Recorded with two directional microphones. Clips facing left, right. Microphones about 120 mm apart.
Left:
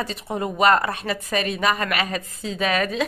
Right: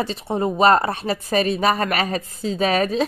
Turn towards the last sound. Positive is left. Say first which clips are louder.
# right 3 dB
turn(degrees=-35)  # may be behind; listen again after turning